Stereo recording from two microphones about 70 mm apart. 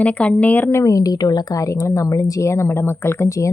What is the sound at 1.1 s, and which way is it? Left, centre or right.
Speech, left.